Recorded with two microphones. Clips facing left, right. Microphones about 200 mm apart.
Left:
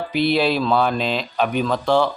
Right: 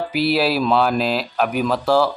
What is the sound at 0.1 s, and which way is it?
A man's voice, 5° right (ahead or behind).